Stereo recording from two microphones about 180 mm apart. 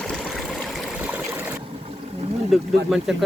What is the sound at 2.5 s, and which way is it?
Speech, centre (ahead or behind).